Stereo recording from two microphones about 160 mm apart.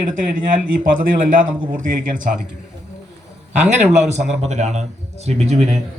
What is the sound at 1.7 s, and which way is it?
Speech, 55° right (ahead or behind).